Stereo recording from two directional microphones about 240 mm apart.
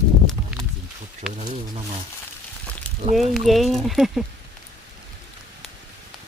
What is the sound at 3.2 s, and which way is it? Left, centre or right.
Speech, centre.